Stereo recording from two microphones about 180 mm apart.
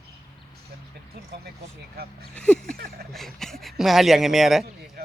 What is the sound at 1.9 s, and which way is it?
Speech, 60° right (ahead or behind).